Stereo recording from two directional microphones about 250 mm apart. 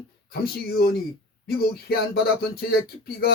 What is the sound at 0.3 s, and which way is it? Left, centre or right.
Speech, left.